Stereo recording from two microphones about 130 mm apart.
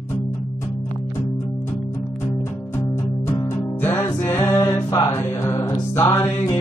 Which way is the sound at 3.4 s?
15° left (ahead or behind).